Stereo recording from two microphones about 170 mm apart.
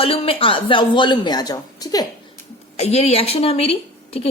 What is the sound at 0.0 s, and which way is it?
A woman's voice, 35° left (ahead or behind).